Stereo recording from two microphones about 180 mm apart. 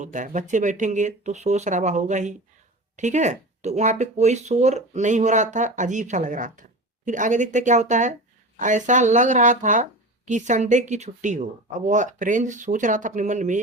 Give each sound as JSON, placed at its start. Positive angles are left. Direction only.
{"t": 0.0, "sound": "speech", "side_deg": -45}